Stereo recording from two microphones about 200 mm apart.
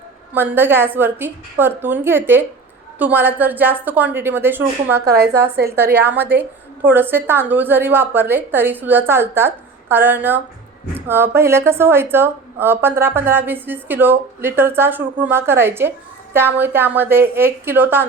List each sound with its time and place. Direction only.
0.3 s a woman's voice: 10° right (ahead or behind)
4.9 s a woman's voice: 55° right (ahead or behind)
5.7 s a woman's voice: 10° right (ahead or behind)